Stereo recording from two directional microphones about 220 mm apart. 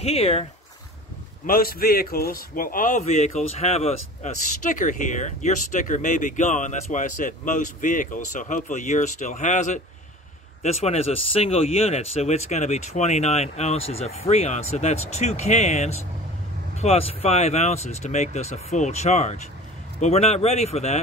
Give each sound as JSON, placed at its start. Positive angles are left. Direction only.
{"t": 0.0, "sound": "speech", "side_deg": 30}
{"t": 1.4, "sound": "a man's voice", "side_deg": 40}